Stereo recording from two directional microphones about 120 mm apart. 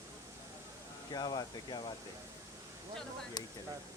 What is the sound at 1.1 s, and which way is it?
Speech, 35° left (ahead or behind).